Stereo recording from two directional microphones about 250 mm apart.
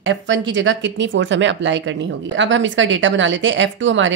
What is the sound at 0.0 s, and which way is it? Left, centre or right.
Speech, right.